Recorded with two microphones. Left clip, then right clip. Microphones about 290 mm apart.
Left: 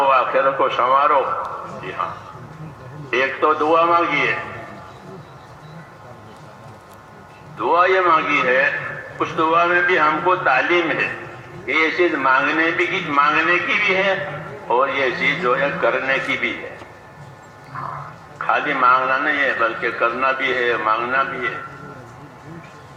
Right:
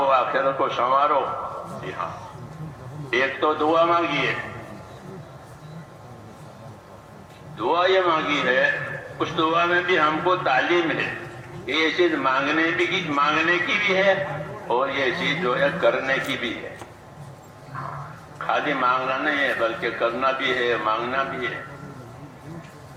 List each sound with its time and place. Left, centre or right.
0.0 s a man's voice: right
3.1 s a man's voice: right
7.6 s a man's voice: right
18.3 s a man's voice: right